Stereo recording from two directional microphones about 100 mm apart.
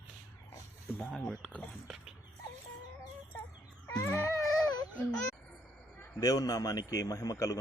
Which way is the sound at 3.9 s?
25° left (ahead or behind).